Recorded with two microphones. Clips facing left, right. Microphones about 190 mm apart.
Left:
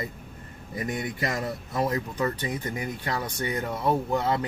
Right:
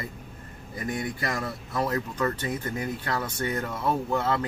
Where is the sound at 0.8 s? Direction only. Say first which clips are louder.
Even; 20° left (ahead or behind).